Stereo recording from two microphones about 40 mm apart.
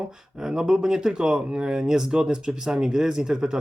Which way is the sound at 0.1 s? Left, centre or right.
Centre.